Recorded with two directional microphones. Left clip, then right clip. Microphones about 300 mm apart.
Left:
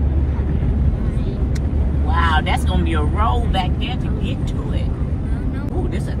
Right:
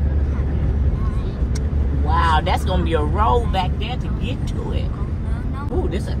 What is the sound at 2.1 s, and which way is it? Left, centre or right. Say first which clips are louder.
Vehicle: right 1 dB; right.